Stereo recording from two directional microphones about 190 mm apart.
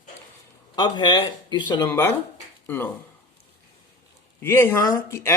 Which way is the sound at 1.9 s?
10° left (ahead or behind).